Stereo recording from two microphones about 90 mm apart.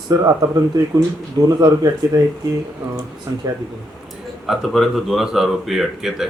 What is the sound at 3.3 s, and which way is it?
Speech, 45° right (ahead or behind).